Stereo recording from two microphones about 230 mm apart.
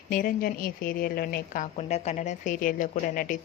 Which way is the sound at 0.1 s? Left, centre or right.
Left.